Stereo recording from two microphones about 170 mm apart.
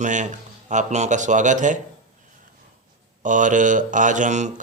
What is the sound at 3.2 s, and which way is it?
A man's voice, 50° right (ahead or behind).